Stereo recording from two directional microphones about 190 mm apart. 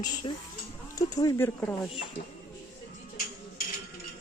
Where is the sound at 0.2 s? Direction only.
25° left (ahead or behind).